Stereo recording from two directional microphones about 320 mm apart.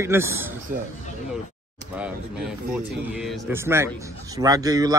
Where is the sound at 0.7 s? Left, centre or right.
Right.